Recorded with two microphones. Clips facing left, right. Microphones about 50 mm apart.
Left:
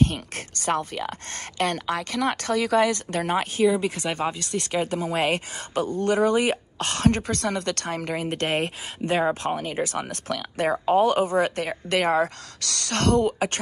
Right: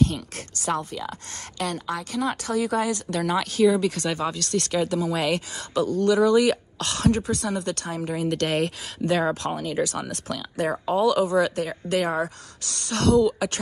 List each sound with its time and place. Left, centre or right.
0.0 s speech: left
3.1 s speech: left
3.8 s speech: left
4.9 s speech: left
8.3 s speech: left
12.6 s speech: left
12.9 s speech: left